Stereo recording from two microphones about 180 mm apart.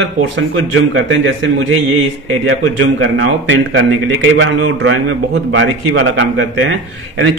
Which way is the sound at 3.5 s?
90° right.